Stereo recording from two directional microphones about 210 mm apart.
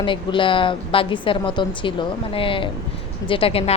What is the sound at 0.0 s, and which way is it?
A woman's voice, 25° left (ahead or behind).